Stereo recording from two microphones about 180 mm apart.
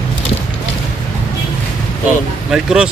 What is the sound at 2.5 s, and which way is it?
Speech, 5° right (ahead or behind).